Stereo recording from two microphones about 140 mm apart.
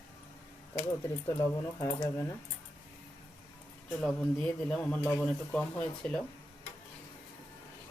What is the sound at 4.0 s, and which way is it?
Speech, 5° left (ahead or behind).